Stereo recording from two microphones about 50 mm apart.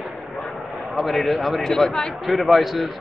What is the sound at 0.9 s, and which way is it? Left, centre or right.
Speech, centre.